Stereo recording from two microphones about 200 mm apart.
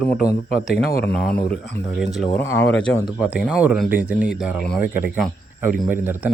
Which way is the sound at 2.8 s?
5° right (ahead or behind).